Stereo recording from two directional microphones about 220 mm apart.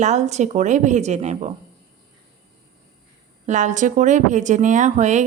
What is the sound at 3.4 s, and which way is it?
Speech, 35° right (ahead or behind).